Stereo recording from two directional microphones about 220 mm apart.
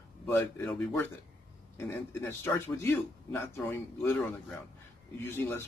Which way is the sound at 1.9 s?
10° left (ahead or behind).